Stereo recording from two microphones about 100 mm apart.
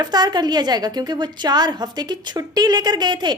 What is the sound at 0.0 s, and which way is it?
A woman's voice, 45° right (ahead or behind).